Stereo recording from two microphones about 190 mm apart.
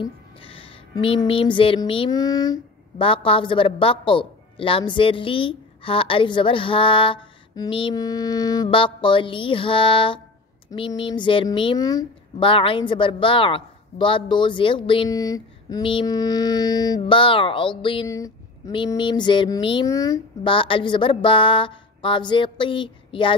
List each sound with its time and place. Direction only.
0.0 s speech: 30° left (ahead or behind)